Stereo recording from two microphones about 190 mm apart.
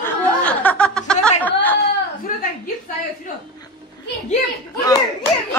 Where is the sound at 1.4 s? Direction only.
10° left (ahead or behind).